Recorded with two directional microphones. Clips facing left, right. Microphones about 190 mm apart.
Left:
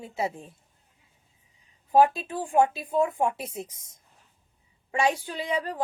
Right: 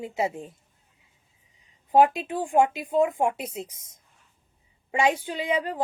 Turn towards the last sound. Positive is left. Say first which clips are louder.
# right 3 dB
turn(degrees=-15)  # may be behind; listen again after turning